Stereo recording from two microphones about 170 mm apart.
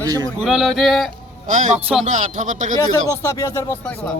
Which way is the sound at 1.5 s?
50° right (ahead or behind).